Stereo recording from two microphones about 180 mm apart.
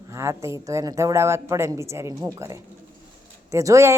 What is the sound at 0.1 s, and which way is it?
A child's voice, 15° right (ahead or behind).